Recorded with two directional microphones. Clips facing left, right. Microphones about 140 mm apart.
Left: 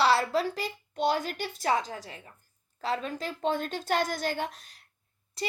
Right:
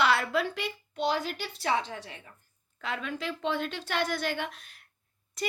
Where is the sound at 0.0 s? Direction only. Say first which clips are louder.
Left 2 dB; 35° left (ahead or behind).